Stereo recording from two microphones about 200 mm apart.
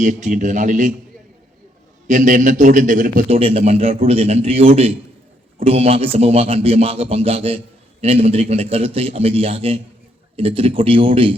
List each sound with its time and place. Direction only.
0.0 s a man's voice: 40° right (ahead or behind)
2.0 s a man's voice: 40° right (ahead or behind)